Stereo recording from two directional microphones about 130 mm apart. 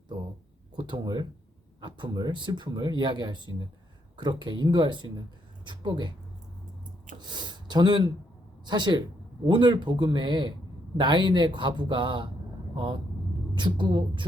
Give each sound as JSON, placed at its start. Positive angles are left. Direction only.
{"t": 0.8, "sound": "speech", "side_deg": -35}
{"t": 7.2, "sound": "speech", "side_deg": -35}